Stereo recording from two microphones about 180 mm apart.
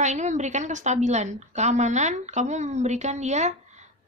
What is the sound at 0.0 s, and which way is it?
A woman's voice, 40° right (ahead or behind).